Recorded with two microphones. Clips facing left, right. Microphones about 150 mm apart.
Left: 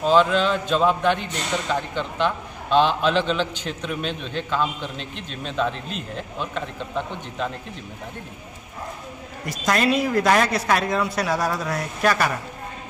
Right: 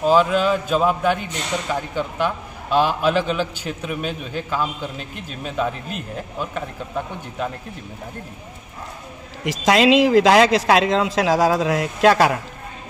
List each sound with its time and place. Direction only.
0.0 s a man's voice: 10° right (ahead or behind)
9.4 s a man's voice: 90° right